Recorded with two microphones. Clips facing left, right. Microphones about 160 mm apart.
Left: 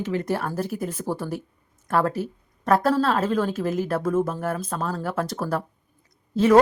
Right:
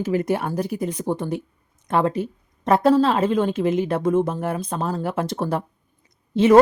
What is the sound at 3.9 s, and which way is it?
Speech, 20° right (ahead or behind).